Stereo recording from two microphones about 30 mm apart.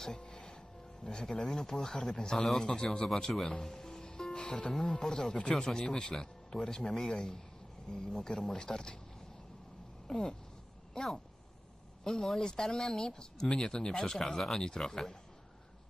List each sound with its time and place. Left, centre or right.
0.0 s music: left
1.0 s speech: left
3.6 s music: centre
4.7 s speech: centre
5.3 s speech: left
5.5 s speech: left
10.1 s speech: centre
12.0 s speech: left